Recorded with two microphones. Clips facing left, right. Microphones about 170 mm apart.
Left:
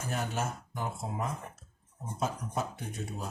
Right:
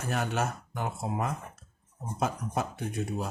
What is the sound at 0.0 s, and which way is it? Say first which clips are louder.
Speech: right 4 dB; 70° right (ahead or behind).